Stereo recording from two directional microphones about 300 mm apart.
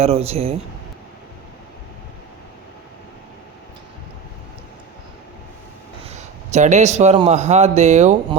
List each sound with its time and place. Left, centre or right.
0.0 s a man's voice: centre
6.5 s a man's voice: right